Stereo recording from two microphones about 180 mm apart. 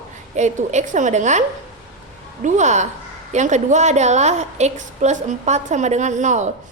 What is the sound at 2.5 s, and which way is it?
A woman's voice, 40° right (ahead or behind).